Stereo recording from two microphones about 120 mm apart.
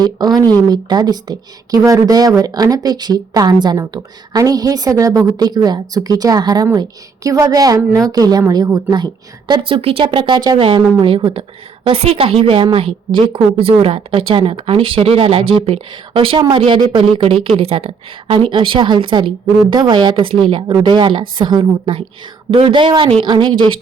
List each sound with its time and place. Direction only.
0.0 s a woman's voice: 35° right (ahead or behind)
9.5 s speech: 45° right (ahead or behind)
10.6 s a woman's voice: 45° right (ahead or behind)
23.3 s speech: 40° right (ahead or behind)